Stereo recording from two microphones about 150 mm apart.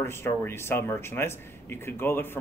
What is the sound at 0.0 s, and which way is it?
Speech, 15° left (ahead or behind).